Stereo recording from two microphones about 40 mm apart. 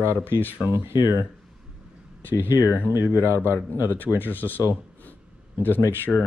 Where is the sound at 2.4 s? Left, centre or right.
Right.